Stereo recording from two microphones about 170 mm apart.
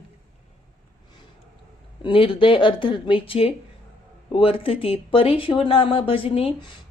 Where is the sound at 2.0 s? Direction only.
30° left (ahead or behind).